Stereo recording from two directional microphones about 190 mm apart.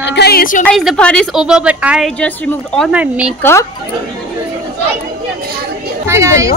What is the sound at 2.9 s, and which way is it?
Speech, 5° right (ahead or behind).